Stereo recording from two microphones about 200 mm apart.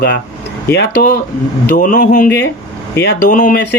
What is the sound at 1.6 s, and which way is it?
Speech, 40° left (ahead or behind).